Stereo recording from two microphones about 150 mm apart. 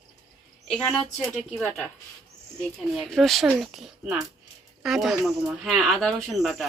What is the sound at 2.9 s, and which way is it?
Speech, centre (ahead or behind).